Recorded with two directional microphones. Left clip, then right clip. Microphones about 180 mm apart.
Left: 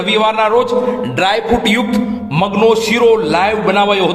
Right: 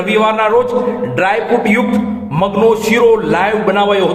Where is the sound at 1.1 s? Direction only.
50° left (ahead or behind).